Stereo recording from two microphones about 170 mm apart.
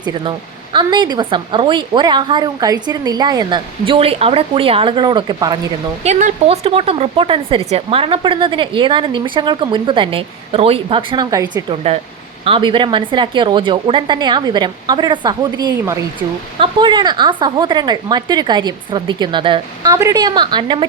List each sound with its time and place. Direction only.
0.0 s a woman's voice: 30° right (ahead or behind)
6.0 s speech: 45° right (ahead or behind); by 11.6 s 25° right (ahead or behind)
11.7 s a woman's voice: 35° right (ahead or behind)
19.9 s a woman's voice: 20° right (ahead or behind)